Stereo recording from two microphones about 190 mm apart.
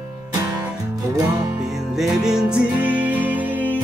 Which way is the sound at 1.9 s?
5° right (ahead or behind).